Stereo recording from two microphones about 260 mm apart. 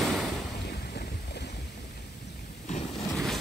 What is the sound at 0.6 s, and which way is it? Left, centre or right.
Boat, left.